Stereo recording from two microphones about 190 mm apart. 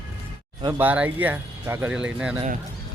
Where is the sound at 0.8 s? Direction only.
10° right (ahead or behind).